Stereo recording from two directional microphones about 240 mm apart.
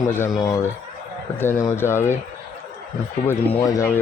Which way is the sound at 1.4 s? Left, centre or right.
Centre.